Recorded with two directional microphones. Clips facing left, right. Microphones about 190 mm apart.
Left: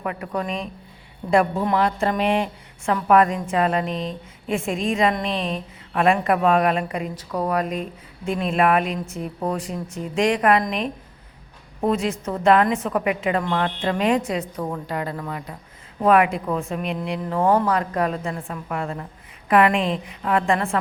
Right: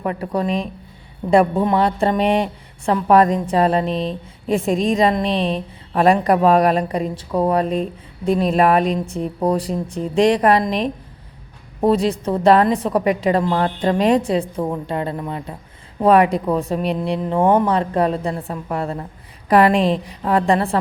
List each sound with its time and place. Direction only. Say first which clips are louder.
0.0 s a woman's voice: right 5 dB; 30° right (ahead or behind)